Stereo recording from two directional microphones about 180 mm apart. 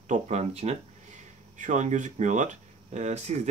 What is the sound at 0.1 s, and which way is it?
Speech, 40° right (ahead or behind).